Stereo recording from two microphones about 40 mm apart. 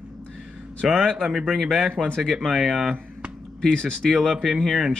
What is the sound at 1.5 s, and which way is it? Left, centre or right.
Speech, centre.